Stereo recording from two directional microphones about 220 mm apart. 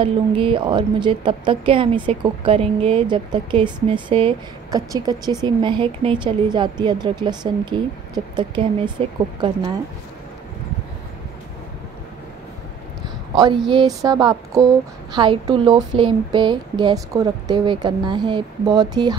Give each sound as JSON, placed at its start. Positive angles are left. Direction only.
{"t": 0.0, "sound": "a woman's voice", "side_deg": -25}
{"t": 13.3, "sound": "speech", "side_deg": -20}
{"t": 13.7, "sound": "a sound", "side_deg": -20}
{"t": 15.1, "sound": "a woman's voice", "side_deg": -20}